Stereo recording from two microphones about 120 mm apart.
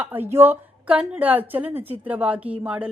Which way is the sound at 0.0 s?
15° right (ahead or behind).